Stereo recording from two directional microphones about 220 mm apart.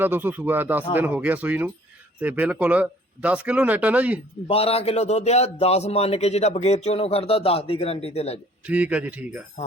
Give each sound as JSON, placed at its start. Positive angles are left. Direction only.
{"t": 0.0, "sound": "speech", "side_deg": -10}
{"t": 4.4, "sound": "a man's voice", "side_deg": 25}
{"t": 8.6, "sound": "speech", "side_deg": -5}